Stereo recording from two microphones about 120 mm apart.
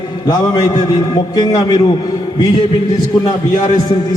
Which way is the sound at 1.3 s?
35° left (ahead or behind).